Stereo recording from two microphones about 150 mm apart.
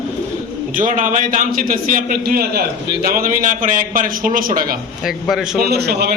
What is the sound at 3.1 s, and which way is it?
A man's voice, 70° right (ahead or behind).